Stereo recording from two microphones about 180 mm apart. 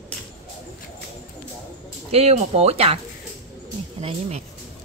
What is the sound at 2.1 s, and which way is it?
Speech, 35° right (ahead or behind).